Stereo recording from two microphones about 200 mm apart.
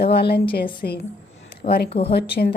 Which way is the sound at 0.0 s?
55° left (ahead or behind).